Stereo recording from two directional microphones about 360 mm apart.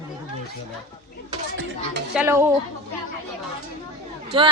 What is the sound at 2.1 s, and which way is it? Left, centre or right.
Speech, centre.